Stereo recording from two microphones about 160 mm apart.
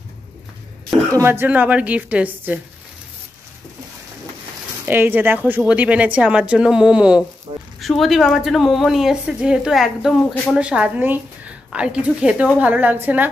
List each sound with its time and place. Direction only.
1.1 s speech: 15° right (ahead or behind)
4.8 s speech: 10° right (ahead or behind)
7.5 s speech: 30° right (ahead or behind)
7.8 s a woman's voice: centre (ahead or behind)